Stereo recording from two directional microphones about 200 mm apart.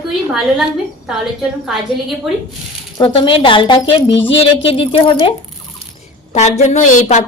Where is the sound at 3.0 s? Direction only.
25° left (ahead or behind).